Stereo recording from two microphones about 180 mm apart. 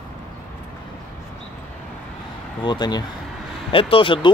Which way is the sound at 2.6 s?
25° left (ahead or behind).